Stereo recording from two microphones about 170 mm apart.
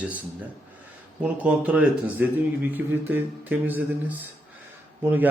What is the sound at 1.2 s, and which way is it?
A man's voice, 10° right (ahead or behind).